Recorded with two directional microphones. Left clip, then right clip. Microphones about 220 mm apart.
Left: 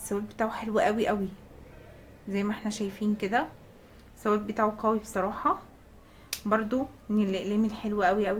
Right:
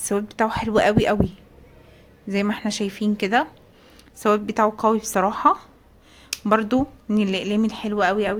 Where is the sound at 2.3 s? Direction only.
40° right (ahead or behind).